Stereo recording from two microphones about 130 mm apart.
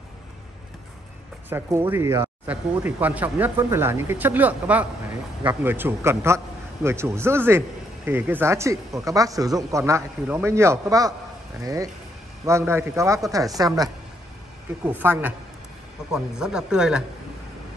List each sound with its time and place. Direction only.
1.5 s a man's voice: 20° right (ahead or behind)
14.9 s speech: 15° right (ahead or behind)